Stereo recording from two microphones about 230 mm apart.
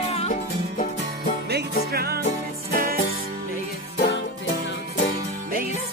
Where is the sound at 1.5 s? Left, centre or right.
Right.